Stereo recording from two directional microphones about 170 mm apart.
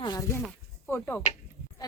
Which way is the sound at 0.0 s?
20° left (ahead or behind).